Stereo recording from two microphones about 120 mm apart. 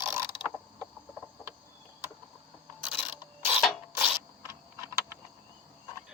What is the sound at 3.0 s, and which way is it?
Mechanisms, 20° right (ahead or behind).